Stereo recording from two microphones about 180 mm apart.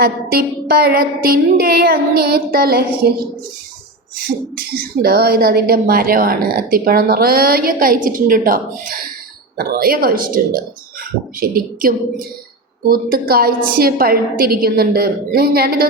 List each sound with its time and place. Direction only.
0.0 s speech: 60° right (ahead or behind)
4.3 s a woman's voice: 55° right (ahead or behind)